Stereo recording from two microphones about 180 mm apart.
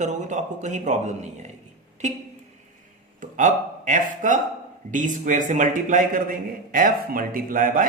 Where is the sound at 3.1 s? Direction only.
45° right (ahead or behind).